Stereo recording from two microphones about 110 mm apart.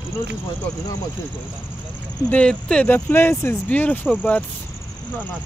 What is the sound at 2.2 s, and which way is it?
Speech, 10° left (ahead or behind).